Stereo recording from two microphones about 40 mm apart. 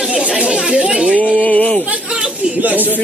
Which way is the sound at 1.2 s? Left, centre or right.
Left.